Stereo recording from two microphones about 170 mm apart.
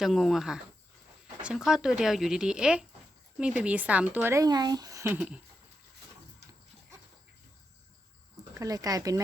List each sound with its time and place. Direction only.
0.0 s speech: centre (ahead or behind)
8.5 s speech: 20° right (ahead or behind)